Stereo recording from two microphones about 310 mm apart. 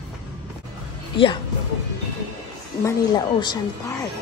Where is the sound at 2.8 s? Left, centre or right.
Centre.